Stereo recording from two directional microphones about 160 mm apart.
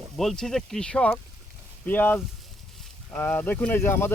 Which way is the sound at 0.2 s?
Centre (ahead or behind).